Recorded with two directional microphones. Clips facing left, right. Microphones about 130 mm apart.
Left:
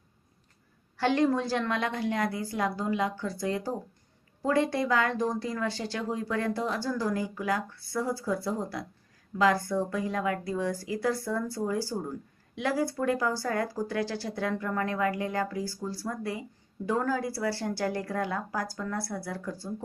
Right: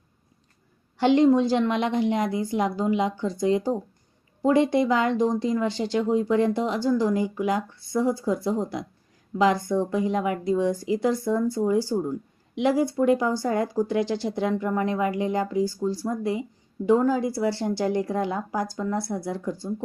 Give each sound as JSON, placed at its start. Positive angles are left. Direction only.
{"t": 0.9, "sound": "speech", "side_deg": -20}